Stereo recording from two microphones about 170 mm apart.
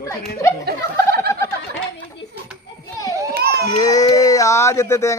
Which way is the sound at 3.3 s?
70° right (ahead or behind).